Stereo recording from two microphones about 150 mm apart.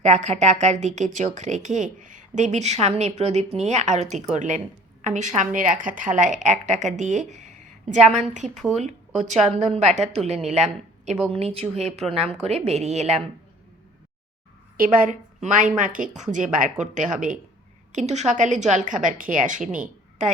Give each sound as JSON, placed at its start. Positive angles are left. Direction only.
{"t": 0.0, "sound": "a woman's voice", "side_deg": -50}
{"t": 14.8, "sound": "a woman's voice", "side_deg": -65}